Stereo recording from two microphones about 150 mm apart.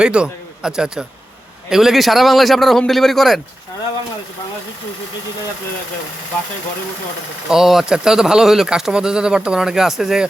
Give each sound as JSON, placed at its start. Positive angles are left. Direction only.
{"t": 0.0, "sound": "a man's voice", "side_deg": -5}
{"t": 7.5, "sound": "speech", "side_deg": 0}